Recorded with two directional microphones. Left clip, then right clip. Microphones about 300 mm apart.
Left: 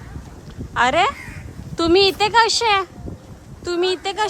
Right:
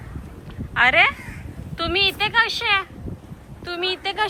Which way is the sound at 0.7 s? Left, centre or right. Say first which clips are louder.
Right 1 dB; centre.